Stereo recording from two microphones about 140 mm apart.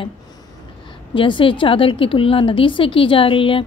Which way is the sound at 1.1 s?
35° left (ahead or behind).